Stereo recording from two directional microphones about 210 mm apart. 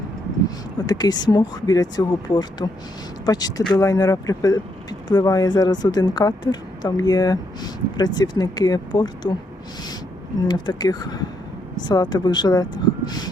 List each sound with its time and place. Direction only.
0.9 s speech: 20° left (ahead or behind)
10.5 s speech: 20° left (ahead or behind)